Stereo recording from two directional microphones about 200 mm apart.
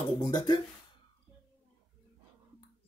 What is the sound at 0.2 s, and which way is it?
Speech, 20° left (ahead or behind).